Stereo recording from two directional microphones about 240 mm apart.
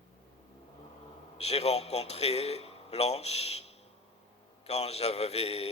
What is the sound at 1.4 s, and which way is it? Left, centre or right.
A man's voice, left.